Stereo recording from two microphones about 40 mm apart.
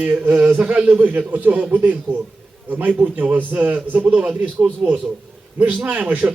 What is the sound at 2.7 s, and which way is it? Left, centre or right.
A man's voice, right.